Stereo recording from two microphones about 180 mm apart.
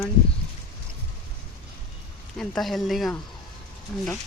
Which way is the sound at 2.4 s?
Centre (ahead or behind).